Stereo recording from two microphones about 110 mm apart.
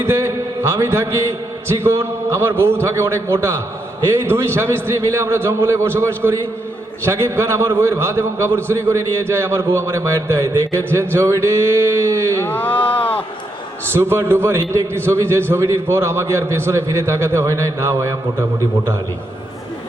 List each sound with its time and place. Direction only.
0.0 s a sound: 25° right (ahead or behind)
1.7 s a man's voice: 25° right (ahead or behind)
12.4 s speech: 15° left (ahead or behind)
13.9 s a man's voice: 20° right (ahead or behind)